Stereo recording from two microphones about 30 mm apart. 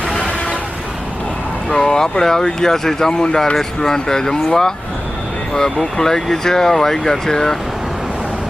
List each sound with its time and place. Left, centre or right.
1.7 s speech: left